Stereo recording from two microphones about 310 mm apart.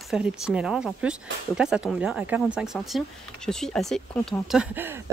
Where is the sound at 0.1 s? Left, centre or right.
Centre.